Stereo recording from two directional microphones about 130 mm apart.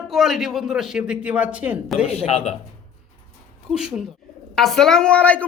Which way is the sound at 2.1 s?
50° left (ahead or behind).